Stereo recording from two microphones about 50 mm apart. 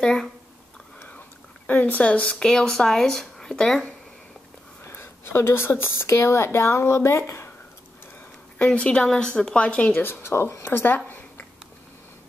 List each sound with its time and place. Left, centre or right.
0.0 s speech: centre
1.7 s a woman's voice: left
2.3 s speech: centre
4.8 s speech: left
8.5 s a woman's voice: left
10.2 s speech: left
11.1 s a sound: left